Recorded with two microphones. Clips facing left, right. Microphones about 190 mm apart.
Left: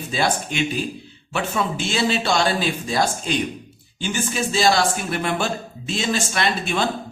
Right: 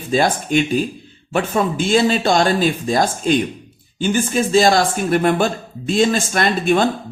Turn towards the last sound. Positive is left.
turn(degrees=-50)  # may be behind; listen again after turning